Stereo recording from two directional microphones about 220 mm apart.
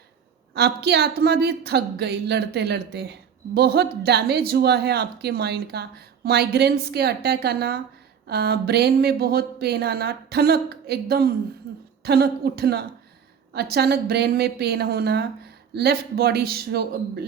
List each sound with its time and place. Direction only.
0.5 s a woman's voice: 45° right (ahead or behind)